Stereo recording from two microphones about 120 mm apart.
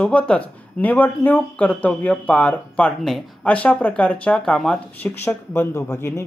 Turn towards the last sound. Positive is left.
turn(degrees=20)  # may be behind; listen again after turning